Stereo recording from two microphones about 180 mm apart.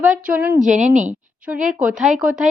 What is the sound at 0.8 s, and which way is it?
Speech, 45° right (ahead or behind).